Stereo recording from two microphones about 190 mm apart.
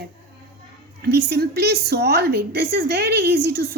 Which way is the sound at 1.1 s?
60° right (ahead or behind).